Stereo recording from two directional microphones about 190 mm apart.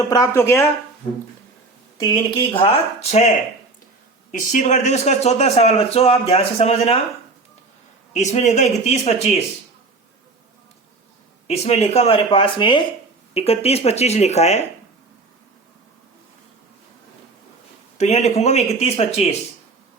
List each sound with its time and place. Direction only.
0.1 s speech: 15° left (ahead or behind)
2.0 s speech: 20° left (ahead or behind)
4.3 s a man's voice: 40° left (ahead or behind)
8.1 s a man's voice: 35° left (ahead or behind)
11.4 s a man's voice: 35° left (ahead or behind)
17.9 s a man's voice: 35° left (ahead or behind)